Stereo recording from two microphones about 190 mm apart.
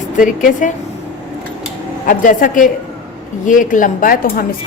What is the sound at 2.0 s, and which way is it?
Speech, 45° left (ahead or behind).